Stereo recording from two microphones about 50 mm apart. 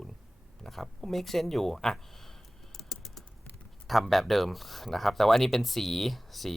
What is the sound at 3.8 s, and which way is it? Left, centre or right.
Speech, centre.